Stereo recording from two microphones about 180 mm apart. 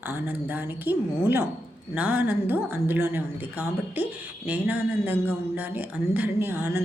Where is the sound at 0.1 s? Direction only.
10° right (ahead or behind).